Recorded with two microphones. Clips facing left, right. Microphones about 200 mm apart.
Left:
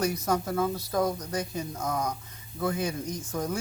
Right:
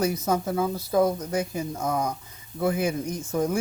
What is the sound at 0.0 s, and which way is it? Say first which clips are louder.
Speech: right 3 dB; 25° right (ahead or behind).